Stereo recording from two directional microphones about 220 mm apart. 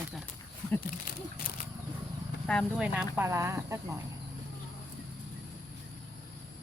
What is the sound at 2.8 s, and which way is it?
Speech, 10° right (ahead or behind).